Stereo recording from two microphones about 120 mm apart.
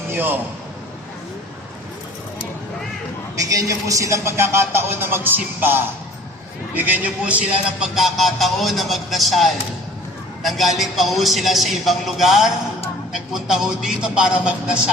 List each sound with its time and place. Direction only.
0.1 s a man's voice: 15° right (ahead or behind)
3.3 s a man's voice: 30° right (ahead or behind); by 7.4 s 10° right (ahead or behind)
7.8 s a man's voice: centre (ahead or behind)